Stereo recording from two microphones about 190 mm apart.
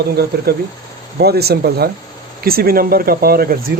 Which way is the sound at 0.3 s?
60° right (ahead or behind).